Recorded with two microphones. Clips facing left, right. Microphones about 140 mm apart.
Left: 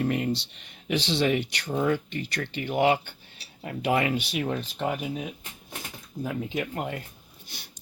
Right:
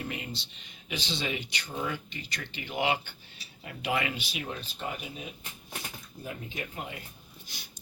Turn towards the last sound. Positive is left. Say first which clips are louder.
# left 8 dB
turn(degrees=60)  # may be behind; listen again after turning